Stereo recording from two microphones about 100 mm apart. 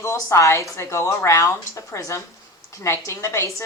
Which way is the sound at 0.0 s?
30° left (ahead or behind).